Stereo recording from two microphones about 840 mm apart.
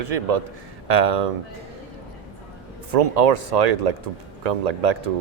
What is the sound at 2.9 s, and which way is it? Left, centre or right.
Speech, right.